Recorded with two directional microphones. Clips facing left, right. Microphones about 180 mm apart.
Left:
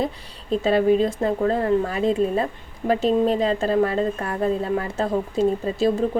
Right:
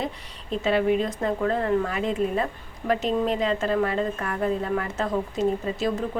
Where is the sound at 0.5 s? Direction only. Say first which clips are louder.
Left 4 dB; 35° left (ahead or behind).